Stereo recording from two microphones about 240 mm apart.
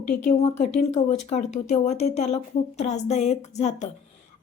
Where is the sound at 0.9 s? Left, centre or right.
Left.